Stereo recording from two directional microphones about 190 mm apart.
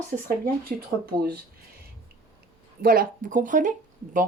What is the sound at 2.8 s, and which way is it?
Speech, 50° right (ahead or behind).